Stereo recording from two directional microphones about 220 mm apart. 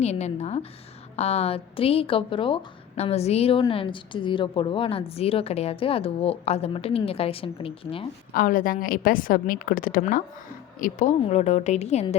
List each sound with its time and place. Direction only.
0.0 s a woman's voice: 30° left (ahead or behind)
8.3 s a woman's voice: 40° left (ahead or behind)